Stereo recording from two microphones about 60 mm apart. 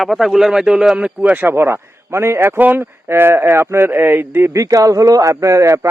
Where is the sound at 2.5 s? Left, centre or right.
Right.